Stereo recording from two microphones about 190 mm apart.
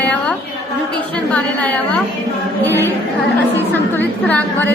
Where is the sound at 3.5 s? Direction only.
10° left (ahead or behind).